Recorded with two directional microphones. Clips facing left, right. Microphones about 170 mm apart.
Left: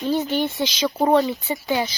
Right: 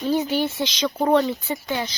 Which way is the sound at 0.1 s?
10° right (ahead or behind).